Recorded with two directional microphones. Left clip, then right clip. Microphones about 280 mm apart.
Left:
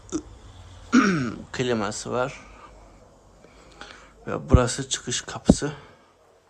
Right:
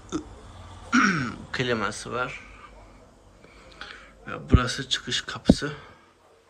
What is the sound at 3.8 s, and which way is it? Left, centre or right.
Speech, centre.